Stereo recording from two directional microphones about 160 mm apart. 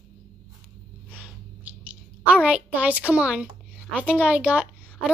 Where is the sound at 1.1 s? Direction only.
10° right (ahead or behind).